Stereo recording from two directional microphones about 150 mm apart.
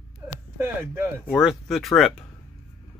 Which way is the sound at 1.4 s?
Centre (ahead or behind).